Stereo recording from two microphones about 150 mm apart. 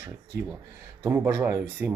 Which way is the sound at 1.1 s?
20° right (ahead or behind).